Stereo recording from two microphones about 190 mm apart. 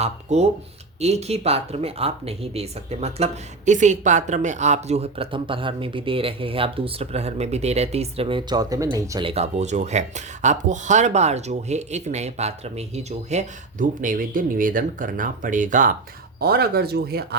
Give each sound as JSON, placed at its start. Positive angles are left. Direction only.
{"t": 0.0, "sound": "speech", "side_deg": -35}
{"t": 9.3, "sound": "speech", "side_deg": -35}